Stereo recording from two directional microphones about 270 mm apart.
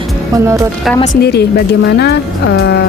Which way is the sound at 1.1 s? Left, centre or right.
Left.